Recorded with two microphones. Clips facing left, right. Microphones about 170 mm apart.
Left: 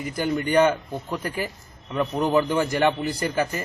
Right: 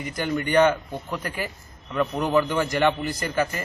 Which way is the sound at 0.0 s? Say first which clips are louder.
Left 2 dB; 10° left (ahead or behind).